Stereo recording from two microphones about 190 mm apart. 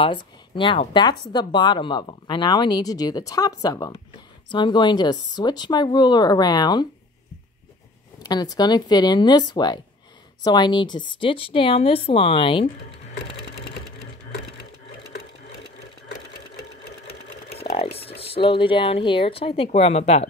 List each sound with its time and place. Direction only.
0.0 s speech: 25° left (ahead or behind)
8.2 s speech: 20° left (ahead or behind)
17.1 s sewing machine: 30° left (ahead or behind)
18.2 s speech: 30° left (ahead or behind)